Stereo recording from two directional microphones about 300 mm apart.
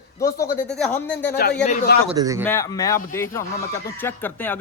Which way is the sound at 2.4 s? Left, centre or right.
Centre.